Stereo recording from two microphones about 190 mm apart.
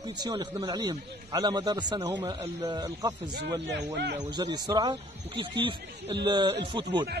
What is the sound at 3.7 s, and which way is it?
Speech, 65° right (ahead or behind).